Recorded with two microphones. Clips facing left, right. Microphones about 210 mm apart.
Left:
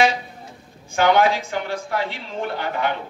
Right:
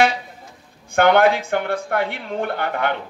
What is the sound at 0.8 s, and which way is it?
A man's voice, 60° right (ahead or behind).